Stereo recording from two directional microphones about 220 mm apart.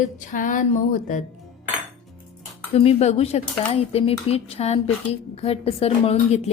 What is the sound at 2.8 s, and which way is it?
Speech, 30° left (ahead or behind).